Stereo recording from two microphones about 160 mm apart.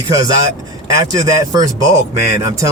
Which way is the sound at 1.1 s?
20° right (ahead or behind).